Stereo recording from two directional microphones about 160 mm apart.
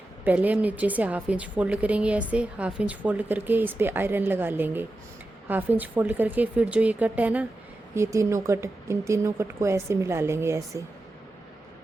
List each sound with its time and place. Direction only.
0.3 s a woman's voice: 10° right (ahead or behind)